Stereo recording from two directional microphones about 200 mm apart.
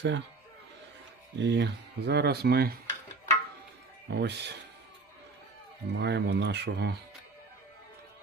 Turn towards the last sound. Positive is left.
turn(degrees=-60)  # may be behind; listen again after turning